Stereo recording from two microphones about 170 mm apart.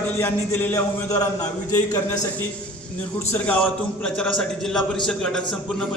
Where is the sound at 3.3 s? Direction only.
10° left (ahead or behind).